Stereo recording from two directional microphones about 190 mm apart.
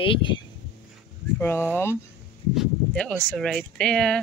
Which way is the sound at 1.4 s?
10° left (ahead or behind).